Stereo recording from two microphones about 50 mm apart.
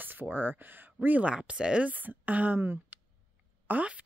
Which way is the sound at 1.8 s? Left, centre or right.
Right.